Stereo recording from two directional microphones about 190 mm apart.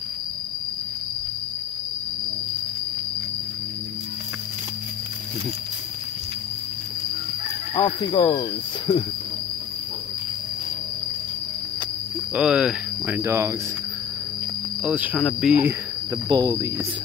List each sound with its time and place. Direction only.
7.7 s speech: 25° left (ahead or behind)
12.4 s speech: 5° right (ahead or behind)
14.9 s speech: 5° right (ahead or behind)
16.3 s speech: 20° right (ahead or behind)